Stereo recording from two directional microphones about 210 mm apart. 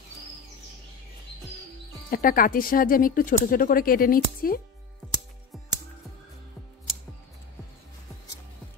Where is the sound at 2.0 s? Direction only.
40° left (ahead or behind).